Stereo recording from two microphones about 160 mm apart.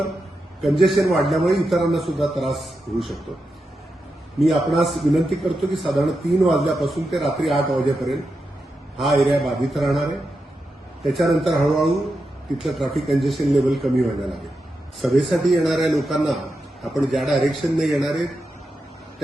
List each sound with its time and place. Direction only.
0.6 s a man's voice: centre (ahead or behind)
4.4 s a man's voice: centre (ahead or behind)
9.2 s a man's voice: centre (ahead or behind)